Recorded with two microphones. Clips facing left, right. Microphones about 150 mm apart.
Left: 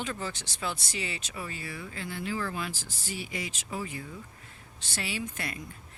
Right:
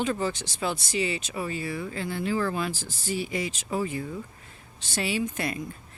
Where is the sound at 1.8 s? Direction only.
35° right (ahead or behind).